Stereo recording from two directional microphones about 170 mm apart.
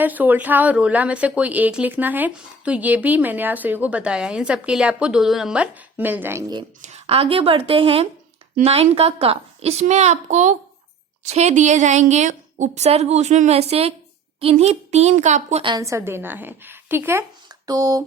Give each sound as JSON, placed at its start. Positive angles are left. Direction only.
{"t": 0.0, "sound": "a woman's voice", "side_deg": -10}
{"t": 6.8, "sound": "a woman's voice", "side_deg": -40}
{"t": 15.6, "sound": "a woman's voice", "side_deg": -20}
{"t": 17.7, "sound": "a sound", "side_deg": -20}